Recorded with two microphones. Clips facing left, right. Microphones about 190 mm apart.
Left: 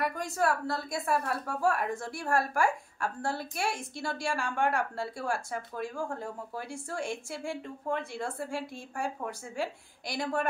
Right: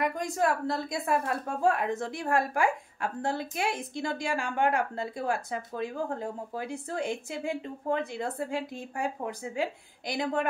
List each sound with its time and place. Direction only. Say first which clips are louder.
0.0 s a woman's voice: right 2 dB; 15° right (ahead or behind)